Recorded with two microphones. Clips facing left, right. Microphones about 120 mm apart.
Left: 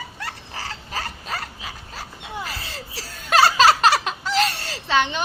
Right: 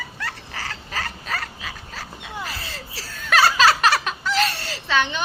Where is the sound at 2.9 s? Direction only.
30° left (ahead or behind).